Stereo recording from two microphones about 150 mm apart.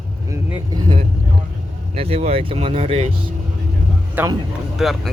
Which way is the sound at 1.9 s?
40° right (ahead or behind).